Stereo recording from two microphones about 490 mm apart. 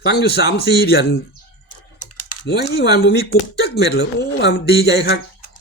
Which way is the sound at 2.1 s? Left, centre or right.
Left.